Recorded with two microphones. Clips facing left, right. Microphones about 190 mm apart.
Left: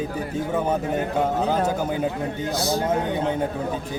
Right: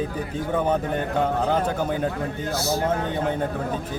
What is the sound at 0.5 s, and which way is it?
A man's voice, 5° left (ahead or behind).